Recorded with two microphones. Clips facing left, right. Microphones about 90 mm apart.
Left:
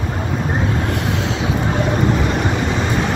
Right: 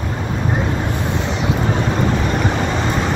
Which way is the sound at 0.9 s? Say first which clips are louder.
Left 1 dB; 90° left.